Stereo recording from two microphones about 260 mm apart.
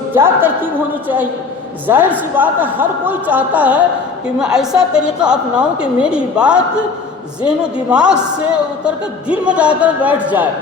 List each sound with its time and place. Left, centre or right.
0.1 s a woman's voice: centre
9.3 s a woman's voice: centre